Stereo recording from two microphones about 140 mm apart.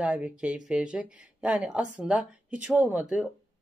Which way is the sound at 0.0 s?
10° right (ahead or behind).